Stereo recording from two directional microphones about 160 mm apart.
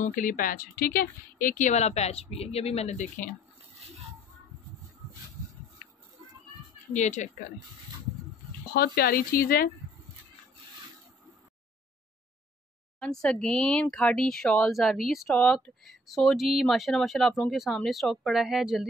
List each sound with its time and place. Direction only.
0.0 s speech: 55° left (ahead or behind)
6.9 s speech: 45° left (ahead or behind)
8.7 s speech: 75° left (ahead or behind)
13.2 s speech: 5° left (ahead or behind)